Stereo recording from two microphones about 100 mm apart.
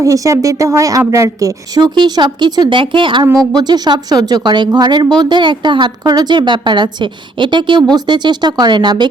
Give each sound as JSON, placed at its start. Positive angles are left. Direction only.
{"t": 0.0, "sound": "speech", "side_deg": -30}
{"t": 3.3, "sound": "a woman's voice", "side_deg": -45}